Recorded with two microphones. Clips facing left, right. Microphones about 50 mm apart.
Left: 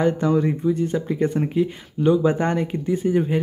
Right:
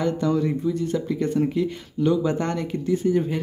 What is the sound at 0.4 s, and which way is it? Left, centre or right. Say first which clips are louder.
Speech: left 3 dB; left.